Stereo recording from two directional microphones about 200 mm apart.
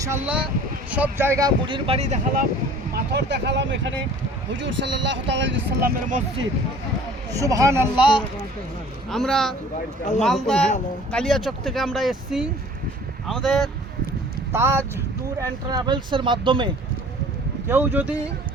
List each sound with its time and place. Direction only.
0.0 s speech: 10° right (ahead or behind); by 2.1 s 30° right (ahead or behind)
2.9 s speech: 55° right (ahead or behind)
7.3 s speech: 15° right (ahead or behind)
7.9 s speech: 25° left (ahead or behind)
9.0 s speech: centre (ahead or behind)
14.5 s speech: 10° right (ahead or behind)
17.7 s speech: 10° right (ahead or behind)